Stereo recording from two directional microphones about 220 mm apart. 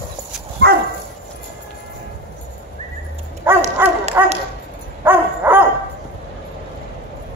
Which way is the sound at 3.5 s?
10° right (ahead or behind).